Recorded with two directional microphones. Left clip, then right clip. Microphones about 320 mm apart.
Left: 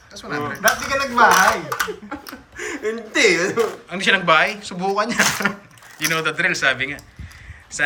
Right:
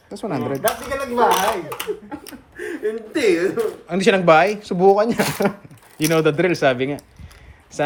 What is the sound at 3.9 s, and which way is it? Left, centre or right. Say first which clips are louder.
Speech: right 3 dB; centre.